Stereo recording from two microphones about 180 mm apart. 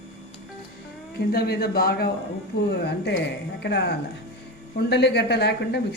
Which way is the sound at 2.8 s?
70° left (ahead or behind).